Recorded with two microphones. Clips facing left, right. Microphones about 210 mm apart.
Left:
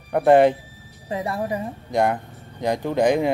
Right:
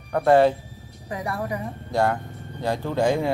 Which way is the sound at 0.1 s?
15° left (ahead or behind).